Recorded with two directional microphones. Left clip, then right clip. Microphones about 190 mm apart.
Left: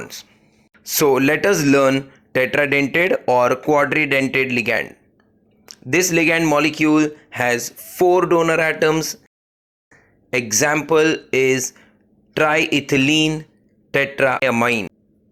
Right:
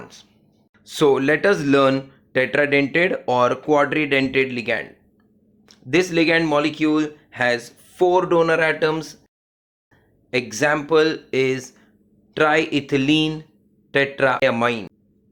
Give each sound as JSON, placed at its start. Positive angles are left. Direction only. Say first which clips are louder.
{"t": 0.0, "sound": "speech", "louder": "left 8 dB", "side_deg": 25}